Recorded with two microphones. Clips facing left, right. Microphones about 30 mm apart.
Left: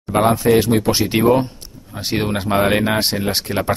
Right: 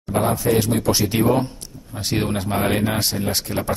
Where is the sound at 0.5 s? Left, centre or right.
Left.